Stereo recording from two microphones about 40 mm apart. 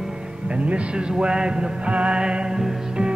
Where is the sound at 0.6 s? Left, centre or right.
Right.